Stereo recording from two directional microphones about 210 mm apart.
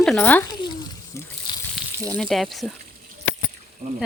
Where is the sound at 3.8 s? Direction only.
30° right (ahead or behind).